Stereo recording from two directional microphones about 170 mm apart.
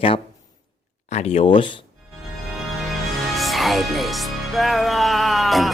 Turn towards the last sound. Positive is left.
turn(degrees=0)  # may be behind; listen again after turning